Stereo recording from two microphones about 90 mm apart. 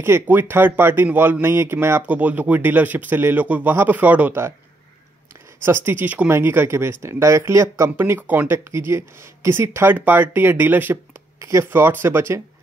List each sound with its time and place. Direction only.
0.0 s speech: 25° right (ahead or behind)
2.0 s speech: 20° right (ahead or behind)
4.3 s speech: 30° right (ahead or behind)
5.6 s speech: 25° right (ahead or behind)
8.3 s speech: 25° right (ahead or behind)
11.3 s speech: 35° right (ahead or behind)
11.6 s speech: 25° right (ahead or behind)